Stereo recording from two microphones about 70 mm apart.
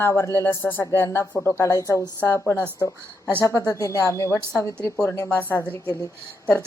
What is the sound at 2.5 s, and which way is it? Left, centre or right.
Speech, left.